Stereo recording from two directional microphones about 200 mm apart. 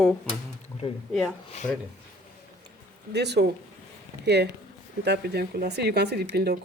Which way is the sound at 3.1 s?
55° right (ahead or behind).